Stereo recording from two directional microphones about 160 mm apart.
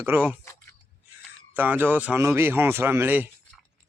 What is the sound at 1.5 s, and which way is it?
Speech, 10° right (ahead or behind).